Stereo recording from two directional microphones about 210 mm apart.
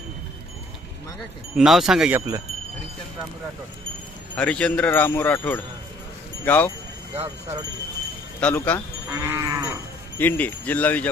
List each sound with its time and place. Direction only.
1.5 s speech: centre (ahead or behind)
4.4 s speech: 5° left (ahead or behind)
7.2 s speech: 30° right (ahead or behind)
8.4 s speech: 5° left (ahead or behind)
9.0 s livestock: 15° right (ahead or behind)
10.2 s speech: 10° left (ahead or behind)